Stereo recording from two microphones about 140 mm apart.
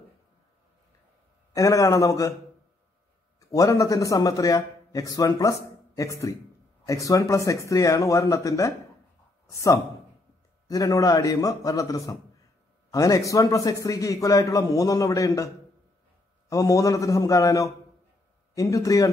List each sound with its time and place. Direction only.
1.5 s a man's voice: 25° left (ahead or behind)
3.3 s a man's voice: 25° left (ahead or behind)